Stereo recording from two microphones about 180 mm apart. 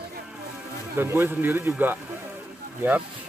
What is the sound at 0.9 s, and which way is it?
Speech, 15° right (ahead or behind).